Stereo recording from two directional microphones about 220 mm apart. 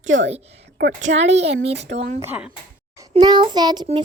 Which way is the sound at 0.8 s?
35° right (ahead or behind).